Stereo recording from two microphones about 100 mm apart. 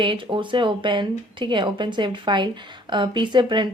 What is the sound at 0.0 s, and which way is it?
A woman's voice, 55° right (ahead or behind).